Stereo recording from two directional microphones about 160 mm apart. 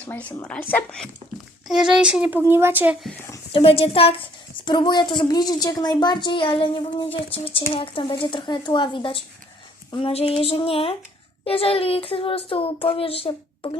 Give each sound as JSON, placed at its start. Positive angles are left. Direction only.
{"t": 0.0, "sound": "a child's voice", "side_deg": 10}
{"t": 3.5, "sound": "a woman's voice", "side_deg": 35}